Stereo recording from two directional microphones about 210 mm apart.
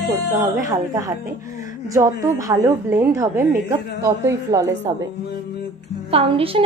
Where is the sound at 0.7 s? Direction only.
15° right (ahead or behind).